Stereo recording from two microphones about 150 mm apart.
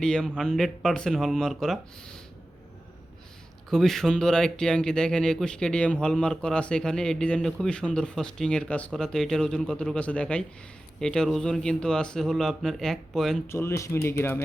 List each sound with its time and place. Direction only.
0.0 s speech: 5° left (ahead or behind)
3.7 s speech: centre (ahead or behind)
13.5 s speech: 20° left (ahead or behind)